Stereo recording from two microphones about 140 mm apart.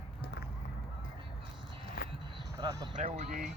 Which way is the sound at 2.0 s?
90° left.